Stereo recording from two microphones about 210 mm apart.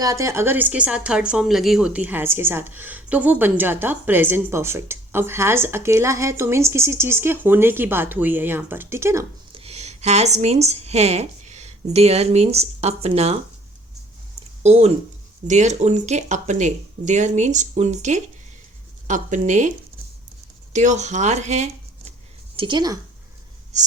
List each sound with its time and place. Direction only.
0.0 s speech: 15° right (ahead or behind)
9.5 s speech: 25° right (ahead or behind)
14.6 s speech: 30° right (ahead or behind)
20.7 s a woman's voice: 35° right (ahead or behind)